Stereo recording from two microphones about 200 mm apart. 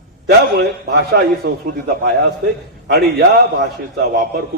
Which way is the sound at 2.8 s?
55° right (ahead or behind).